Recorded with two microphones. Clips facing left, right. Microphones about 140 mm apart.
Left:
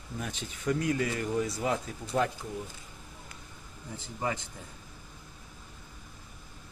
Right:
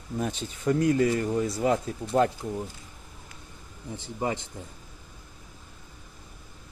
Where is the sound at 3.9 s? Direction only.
25° right (ahead or behind).